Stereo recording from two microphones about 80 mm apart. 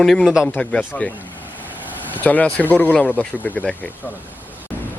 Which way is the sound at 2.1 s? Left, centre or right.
Left.